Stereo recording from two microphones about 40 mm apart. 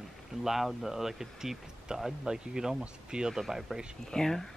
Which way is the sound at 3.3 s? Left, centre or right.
Centre.